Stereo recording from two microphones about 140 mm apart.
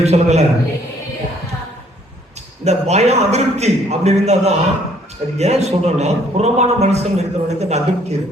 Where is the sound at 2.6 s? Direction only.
50° right (ahead or behind).